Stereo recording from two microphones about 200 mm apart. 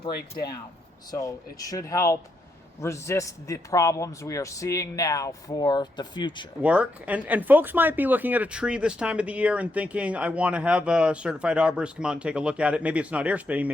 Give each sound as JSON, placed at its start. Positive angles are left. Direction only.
{"t": 1.1, "sound": "a man's voice", "side_deg": 15}
{"t": 6.6, "sound": "speech", "side_deg": -5}